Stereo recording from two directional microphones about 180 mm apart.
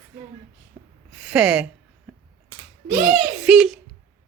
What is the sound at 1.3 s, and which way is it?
Speech, 5° right (ahead or behind).